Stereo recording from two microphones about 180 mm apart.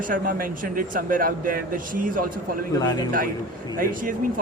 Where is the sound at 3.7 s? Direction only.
50° right (ahead or behind).